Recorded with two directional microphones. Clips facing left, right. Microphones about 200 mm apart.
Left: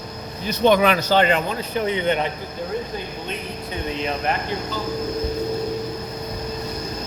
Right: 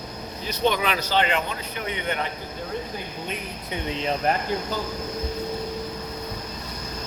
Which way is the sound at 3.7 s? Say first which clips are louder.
Left 1 dB; 25° right (ahead or behind).